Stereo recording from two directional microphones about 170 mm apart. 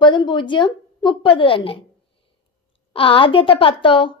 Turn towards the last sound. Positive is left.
turn(degrees=30)  # may be behind; listen again after turning